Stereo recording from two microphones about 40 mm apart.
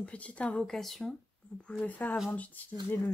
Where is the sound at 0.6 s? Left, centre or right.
Centre.